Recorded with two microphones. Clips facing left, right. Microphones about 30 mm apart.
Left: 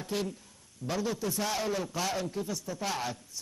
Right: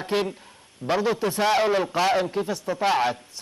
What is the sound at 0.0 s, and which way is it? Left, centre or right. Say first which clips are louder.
A man's voice: right 9 dB; right.